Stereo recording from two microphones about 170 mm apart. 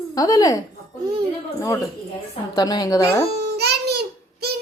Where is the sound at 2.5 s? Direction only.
25° left (ahead or behind).